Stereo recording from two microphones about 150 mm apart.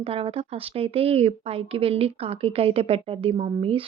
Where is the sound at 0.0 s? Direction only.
40° right (ahead or behind).